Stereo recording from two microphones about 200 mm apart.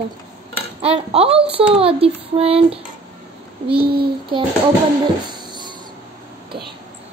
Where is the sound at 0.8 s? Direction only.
30° right (ahead or behind).